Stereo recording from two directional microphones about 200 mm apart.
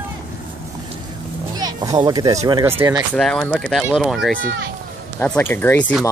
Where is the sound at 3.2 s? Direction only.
5° left (ahead or behind).